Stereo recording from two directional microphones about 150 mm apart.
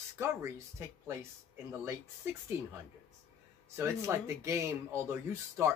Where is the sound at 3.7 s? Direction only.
15° right (ahead or behind).